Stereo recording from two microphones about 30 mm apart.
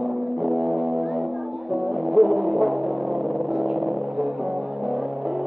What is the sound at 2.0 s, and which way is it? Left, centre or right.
Music, centre.